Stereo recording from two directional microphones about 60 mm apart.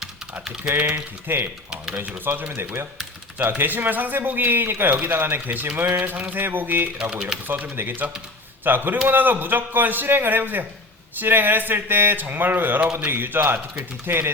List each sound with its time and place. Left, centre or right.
0.7 s speech: right
5.5 s speech: right
7.0 s speech: centre
7.4 s speech: right